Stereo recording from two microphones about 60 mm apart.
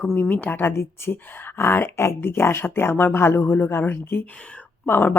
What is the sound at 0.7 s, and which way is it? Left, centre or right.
Speech, left.